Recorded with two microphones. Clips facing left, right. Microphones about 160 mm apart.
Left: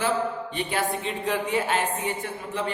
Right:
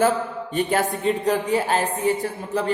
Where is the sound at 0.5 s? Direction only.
45° right (ahead or behind).